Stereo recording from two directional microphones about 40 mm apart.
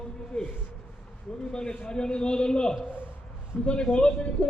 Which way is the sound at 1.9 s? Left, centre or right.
Left.